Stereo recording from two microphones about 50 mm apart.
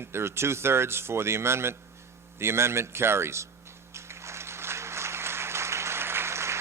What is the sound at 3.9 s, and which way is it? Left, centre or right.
Applause, right.